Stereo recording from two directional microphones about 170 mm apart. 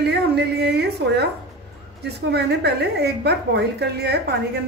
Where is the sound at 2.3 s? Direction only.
75° right (ahead or behind).